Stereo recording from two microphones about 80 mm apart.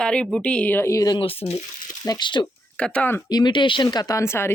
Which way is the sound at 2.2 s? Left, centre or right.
Left.